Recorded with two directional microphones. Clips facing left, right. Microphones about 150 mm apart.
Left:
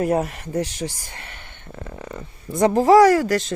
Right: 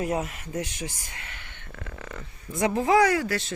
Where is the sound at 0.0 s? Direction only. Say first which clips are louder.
Left 7 dB; 40° left (ahead or behind).